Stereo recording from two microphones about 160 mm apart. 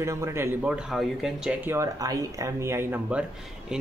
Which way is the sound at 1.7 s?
20° right (ahead or behind).